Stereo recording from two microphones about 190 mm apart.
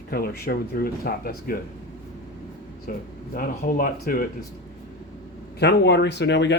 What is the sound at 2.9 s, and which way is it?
Speech, 50° left (ahead or behind).